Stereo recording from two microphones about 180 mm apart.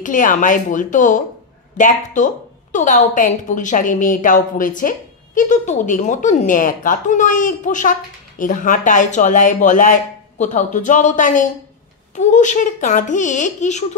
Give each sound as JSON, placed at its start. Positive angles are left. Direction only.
{"t": 0.0, "sound": "a woman's voice", "side_deg": 45}